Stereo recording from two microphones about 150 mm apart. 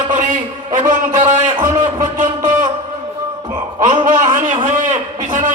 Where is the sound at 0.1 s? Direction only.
55° right (ahead or behind).